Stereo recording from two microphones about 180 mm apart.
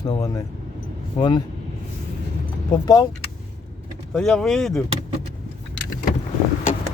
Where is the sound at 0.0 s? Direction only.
20° left (ahead or behind).